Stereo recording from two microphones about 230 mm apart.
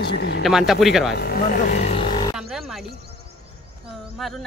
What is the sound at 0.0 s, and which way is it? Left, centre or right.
Speech, left.